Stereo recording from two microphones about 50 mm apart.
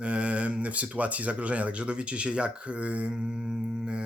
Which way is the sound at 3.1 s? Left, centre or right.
Centre.